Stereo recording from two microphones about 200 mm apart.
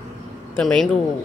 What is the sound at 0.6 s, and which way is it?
Speech, centre (ahead or behind).